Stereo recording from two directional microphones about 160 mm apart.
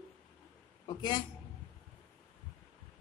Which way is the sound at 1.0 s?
25° left (ahead or behind).